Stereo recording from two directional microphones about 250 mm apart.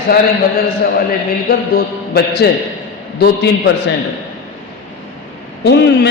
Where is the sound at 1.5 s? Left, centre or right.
Left.